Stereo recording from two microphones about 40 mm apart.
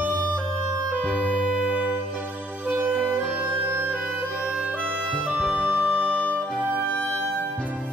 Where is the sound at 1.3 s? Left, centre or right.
Right.